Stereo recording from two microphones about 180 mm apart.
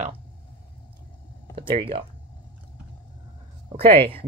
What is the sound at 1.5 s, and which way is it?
Speech, 30° right (ahead or behind).